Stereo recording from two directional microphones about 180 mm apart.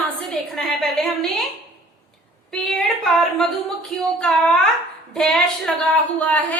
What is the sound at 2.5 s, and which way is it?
A woman's voice, 5° left (ahead or behind).